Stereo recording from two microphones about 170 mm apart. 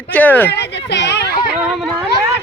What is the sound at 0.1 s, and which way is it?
Speech, 10° left (ahead or behind).